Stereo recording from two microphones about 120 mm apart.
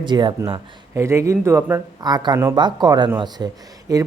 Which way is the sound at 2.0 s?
35° right (ahead or behind).